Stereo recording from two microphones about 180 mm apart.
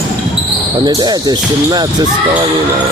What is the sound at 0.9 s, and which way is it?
Speech, 20° right (ahead or behind).